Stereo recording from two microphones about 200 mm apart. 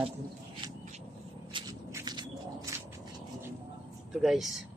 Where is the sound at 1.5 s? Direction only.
25° right (ahead or behind).